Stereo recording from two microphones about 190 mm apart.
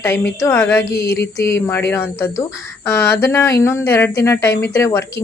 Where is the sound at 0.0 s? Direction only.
15° left (ahead or behind).